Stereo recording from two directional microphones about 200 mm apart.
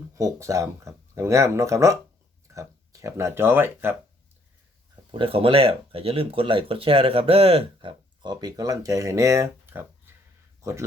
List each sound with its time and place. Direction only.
0.1 s speech: 15° right (ahead or behind)
5.1 s speech: 25° right (ahead or behind)
10.1 s a sound: 10° right (ahead or behind)
10.6 s speech: 15° right (ahead or behind)